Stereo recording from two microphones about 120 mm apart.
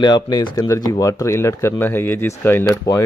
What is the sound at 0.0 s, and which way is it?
Speech, 40° left (ahead or behind).